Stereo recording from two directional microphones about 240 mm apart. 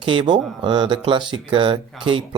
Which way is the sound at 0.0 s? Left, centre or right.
Right.